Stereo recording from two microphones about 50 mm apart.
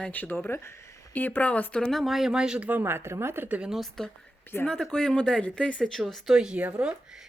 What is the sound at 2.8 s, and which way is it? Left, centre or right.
Speech, right.